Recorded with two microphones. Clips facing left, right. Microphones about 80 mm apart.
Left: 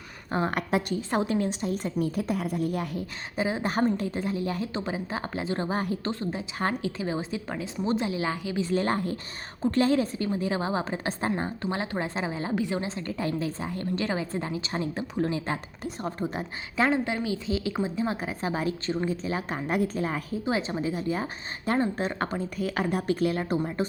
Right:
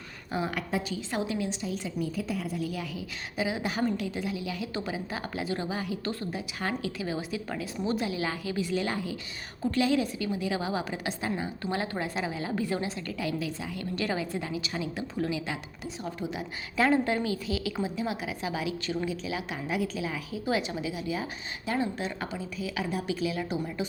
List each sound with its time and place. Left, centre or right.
0.3 s a woman's voice: left
0.7 s a woman's voice: left
1.1 s a woman's voice: left
3.3 s a woman's voice: left
4.7 s a woman's voice: left
6.1 s a woman's voice: left
8.7 s a woman's voice: left
13.1 s a woman's voice: left
16.4 s a woman's voice: left
20.4 s a woman's voice: left